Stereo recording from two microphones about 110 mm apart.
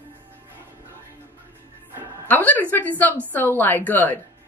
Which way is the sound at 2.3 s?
15° left (ahead or behind).